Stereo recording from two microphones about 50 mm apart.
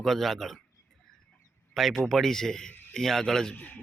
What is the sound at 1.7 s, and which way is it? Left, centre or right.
Speech, centre.